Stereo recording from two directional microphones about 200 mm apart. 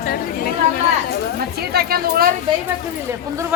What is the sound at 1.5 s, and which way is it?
Speech, 50° right (ahead or behind).